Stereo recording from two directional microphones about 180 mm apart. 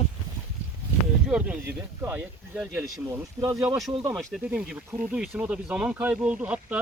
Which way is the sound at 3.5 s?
5° right (ahead or behind).